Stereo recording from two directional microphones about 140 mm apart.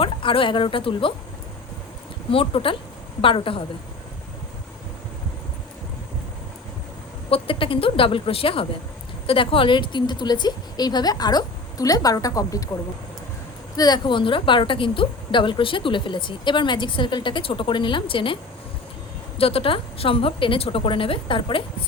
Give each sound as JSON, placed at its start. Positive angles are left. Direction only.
{"t": 0.0, "sound": "speech", "side_deg": 40}
{"t": 2.3, "sound": "speech", "side_deg": 40}
{"t": 7.3, "sound": "a woman's voice", "side_deg": 40}
{"t": 13.7, "sound": "speech", "side_deg": 30}
{"t": 19.4, "sound": "speech", "side_deg": 40}